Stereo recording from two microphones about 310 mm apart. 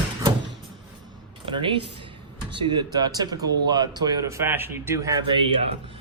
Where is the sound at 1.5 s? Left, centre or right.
Centre.